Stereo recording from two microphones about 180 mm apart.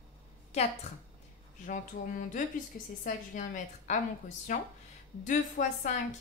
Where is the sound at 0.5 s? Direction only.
35° left (ahead or behind).